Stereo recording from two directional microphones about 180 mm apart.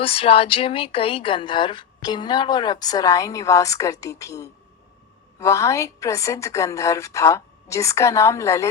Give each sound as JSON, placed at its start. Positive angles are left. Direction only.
{"t": 0.0, "sound": "a woman's voice", "side_deg": 30}